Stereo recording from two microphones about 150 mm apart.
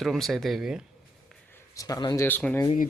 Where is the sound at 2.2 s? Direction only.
10° left (ahead or behind).